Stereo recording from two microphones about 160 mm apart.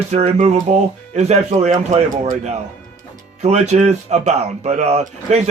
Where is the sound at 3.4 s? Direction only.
45° right (ahead or behind).